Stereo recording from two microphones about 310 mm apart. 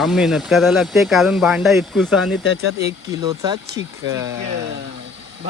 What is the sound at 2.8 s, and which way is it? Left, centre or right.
Speech, centre.